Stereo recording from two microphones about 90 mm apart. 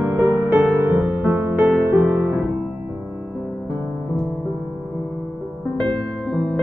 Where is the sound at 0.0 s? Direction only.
15° right (ahead or behind).